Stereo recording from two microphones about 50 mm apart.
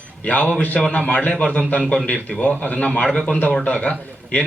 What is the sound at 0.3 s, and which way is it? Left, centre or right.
A man's voice, left.